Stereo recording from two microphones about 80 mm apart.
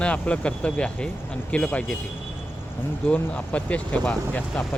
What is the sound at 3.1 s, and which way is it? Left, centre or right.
Speech, centre.